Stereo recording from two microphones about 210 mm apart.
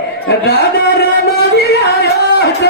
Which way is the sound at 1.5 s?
50° left (ahead or behind).